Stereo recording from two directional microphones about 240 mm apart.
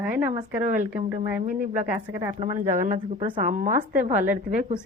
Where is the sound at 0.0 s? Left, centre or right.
Centre.